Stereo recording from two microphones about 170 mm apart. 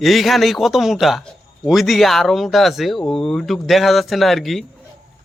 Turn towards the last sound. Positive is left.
turn(degrees=0)  # may be behind; listen again after turning